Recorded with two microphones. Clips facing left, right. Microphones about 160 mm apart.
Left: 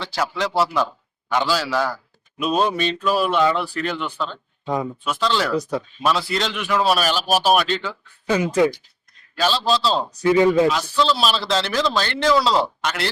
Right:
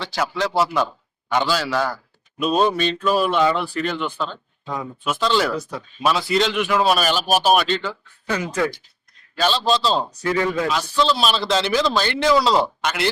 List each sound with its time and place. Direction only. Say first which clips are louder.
0.0 s a man's voice: right 1 dB; centre (ahead or behind)
4.6 s speech: left 5 dB; 30° left (ahead or behind)
5.0 s a man's voice: right 4 dB; 5° right (ahead or behind)
8.3 s speech: left 5 dB; 15° left (ahead or behind)
9.4 s a man's voice: even; 5° left (ahead or behind)
10.2 s speech: left 7 dB; 20° left (ahead or behind)
10.9 s a man's voice: even; centre (ahead or behind)